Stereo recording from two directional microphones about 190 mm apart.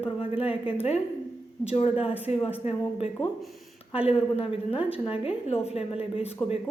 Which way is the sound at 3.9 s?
30° left (ahead or behind).